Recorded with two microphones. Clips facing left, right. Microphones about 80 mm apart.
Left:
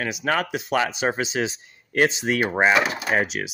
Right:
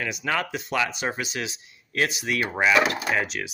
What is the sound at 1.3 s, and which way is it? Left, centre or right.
Speech, left.